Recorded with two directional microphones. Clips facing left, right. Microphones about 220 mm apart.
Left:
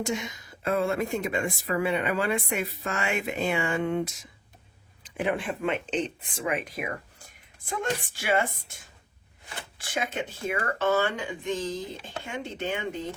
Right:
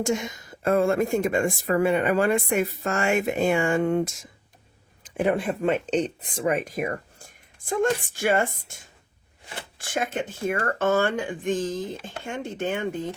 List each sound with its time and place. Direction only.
0.0 s a woman's voice: 45° right (ahead or behind)